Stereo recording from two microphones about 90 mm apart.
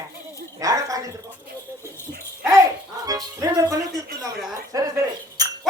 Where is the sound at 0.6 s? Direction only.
40° right (ahead or behind).